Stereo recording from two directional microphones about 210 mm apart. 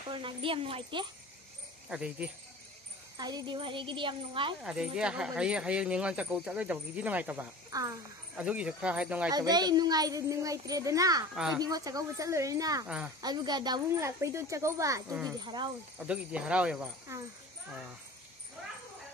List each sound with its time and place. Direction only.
0.1 s speech: 25° right (ahead or behind)
1.9 s speech: 5° right (ahead or behind)
3.2 s speech: 20° right (ahead or behind)
4.6 s speech: 5° right (ahead or behind)
9.3 s speech: 20° right (ahead or behind)
12.8 s speech: 5° right (ahead or behind)
13.2 s speech: 20° right (ahead or behind)
16.1 s speech: 5° right (ahead or behind)